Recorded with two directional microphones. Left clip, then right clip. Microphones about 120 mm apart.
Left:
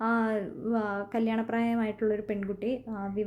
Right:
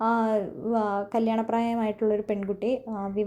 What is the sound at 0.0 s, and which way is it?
A woman's voice, 10° right (ahead or behind).